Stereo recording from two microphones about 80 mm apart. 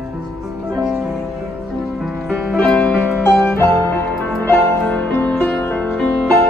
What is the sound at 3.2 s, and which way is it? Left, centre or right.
Music, left.